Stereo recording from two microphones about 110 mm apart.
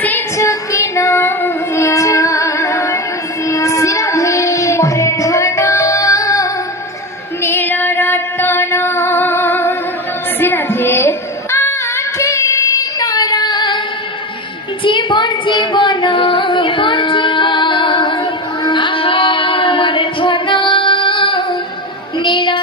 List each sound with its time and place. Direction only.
0.4 s child singing: 30° left (ahead or behind)
7.4 s music: 20° left (ahead or behind)
10.4 s a sound: 20° left (ahead or behind)
12.2 s child singing: 30° left (ahead or behind)
14.8 s female singing: 45° left (ahead or behind)
22.2 s music: 50° left (ahead or behind)